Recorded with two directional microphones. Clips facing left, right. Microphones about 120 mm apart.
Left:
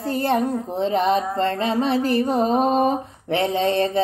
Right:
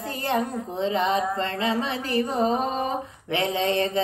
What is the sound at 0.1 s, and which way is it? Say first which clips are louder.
Child singing: left 5 dB; 40° left (ahead or behind).